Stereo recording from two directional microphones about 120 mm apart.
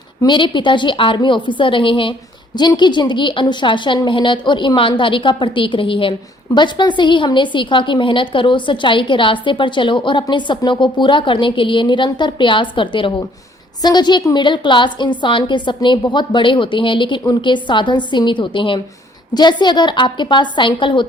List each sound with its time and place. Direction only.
0.2 s a woman's voice: 40° left (ahead or behind)